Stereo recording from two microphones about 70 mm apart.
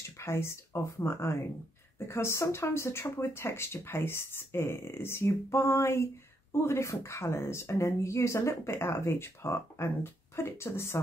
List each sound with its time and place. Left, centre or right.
0.2 s speech: left